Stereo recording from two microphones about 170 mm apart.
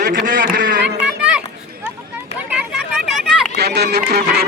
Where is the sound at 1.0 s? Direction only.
5° right (ahead or behind).